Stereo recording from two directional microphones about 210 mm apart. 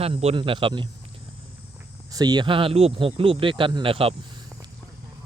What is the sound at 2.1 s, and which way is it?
Speech, 20° right (ahead or behind).